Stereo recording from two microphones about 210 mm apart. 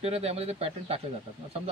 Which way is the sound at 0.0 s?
30° right (ahead or behind).